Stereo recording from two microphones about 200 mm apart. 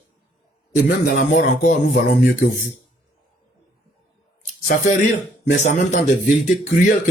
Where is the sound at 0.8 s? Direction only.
45° left (ahead or behind).